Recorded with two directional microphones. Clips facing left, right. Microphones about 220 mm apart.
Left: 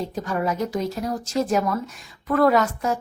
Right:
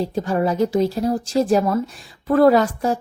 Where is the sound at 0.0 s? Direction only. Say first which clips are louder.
Right 5 dB; 30° right (ahead or behind).